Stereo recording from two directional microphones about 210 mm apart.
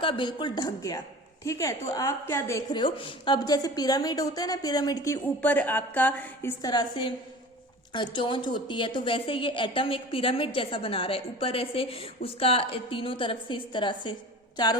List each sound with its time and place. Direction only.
0.0 s a woman's voice: 25° left (ahead or behind)